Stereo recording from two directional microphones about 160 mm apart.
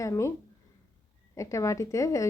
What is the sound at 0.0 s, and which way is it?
Speech, 20° left (ahead or behind).